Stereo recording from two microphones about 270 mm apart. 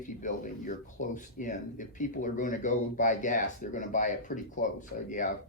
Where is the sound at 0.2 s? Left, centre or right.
Left.